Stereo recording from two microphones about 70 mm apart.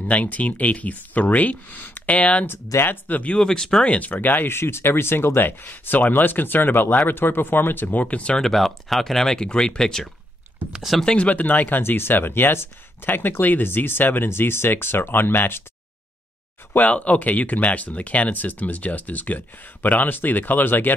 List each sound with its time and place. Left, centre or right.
0.1 s speech: left
2.4 s speech: left
3.4 s speech: centre
3.8 s speech: centre
8.4 s speech: centre
10.7 s speech: centre
11.0 s speech: centre; by 15.6 s left
16.7 s speech: left